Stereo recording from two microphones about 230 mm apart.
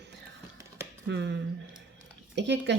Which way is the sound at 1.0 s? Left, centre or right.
Right.